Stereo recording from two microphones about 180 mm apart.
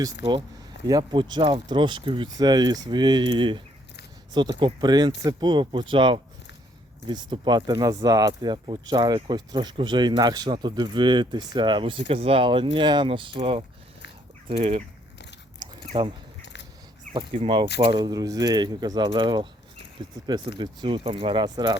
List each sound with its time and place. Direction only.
0.9 s speech: 25° right (ahead or behind)
15.9 s speech: 30° right (ahead or behind)
16.4 s scissors: 75° left (ahead or behind)
17.2 s speech: 30° right (ahead or behind)
20.6 s speech: 30° right (ahead or behind)